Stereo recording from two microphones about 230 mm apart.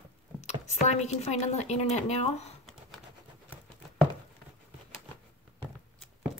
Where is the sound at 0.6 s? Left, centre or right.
Left.